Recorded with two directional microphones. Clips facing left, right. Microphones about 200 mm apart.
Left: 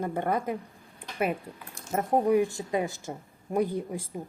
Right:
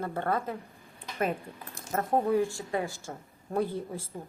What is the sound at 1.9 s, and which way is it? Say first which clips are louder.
A woman's voice: left 3 dB; 15° left (ahead or behind).